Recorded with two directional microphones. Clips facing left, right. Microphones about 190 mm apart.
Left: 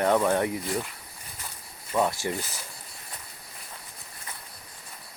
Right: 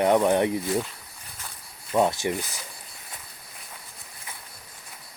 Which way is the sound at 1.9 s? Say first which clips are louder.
Right 3 dB; 20° right (ahead or behind).